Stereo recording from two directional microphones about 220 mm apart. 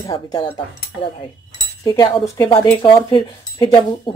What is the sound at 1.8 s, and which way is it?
Speech, 15° left (ahead or behind).